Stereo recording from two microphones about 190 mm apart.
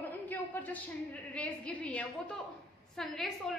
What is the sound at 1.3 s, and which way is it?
A woman's voice, 5° left (ahead or behind).